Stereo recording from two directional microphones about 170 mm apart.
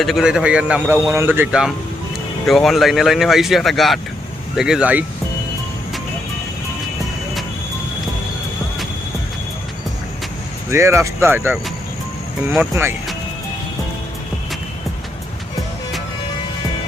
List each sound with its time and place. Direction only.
0.0 s a man's voice: centre (ahead or behind)
10.7 s speech: 15° right (ahead or behind)